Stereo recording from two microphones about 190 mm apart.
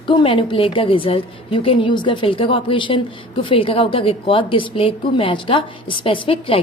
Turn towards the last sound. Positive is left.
turn(degrees=30)  # may be behind; listen again after turning